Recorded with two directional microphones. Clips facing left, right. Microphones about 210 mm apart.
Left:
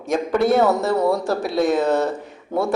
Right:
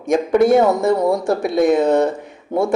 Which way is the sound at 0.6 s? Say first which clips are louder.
Right 3 dB; 15° right (ahead or behind).